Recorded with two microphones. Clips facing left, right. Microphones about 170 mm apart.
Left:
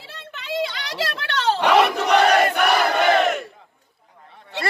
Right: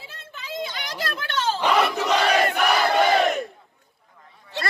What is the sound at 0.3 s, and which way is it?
Battle cry, 75° left (ahead or behind).